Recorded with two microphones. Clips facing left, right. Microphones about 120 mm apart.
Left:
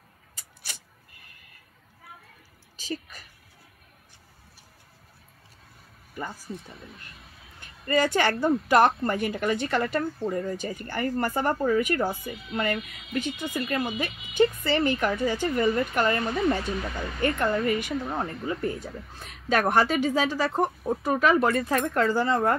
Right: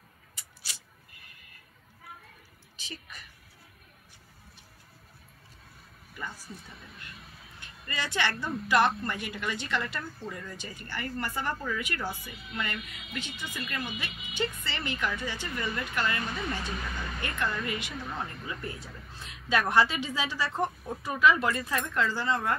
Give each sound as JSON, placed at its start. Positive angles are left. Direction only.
{"t": 0.6, "sound": "vehicle", "side_deg": 55}
{"t": 2.8, "sound": "speech", "side_deg": 40}
{"t": 6.1, "sound": "speech", "side_deg": 45}
{"t": 7.6, "sound": "a woman's voice", "side_deg": 45}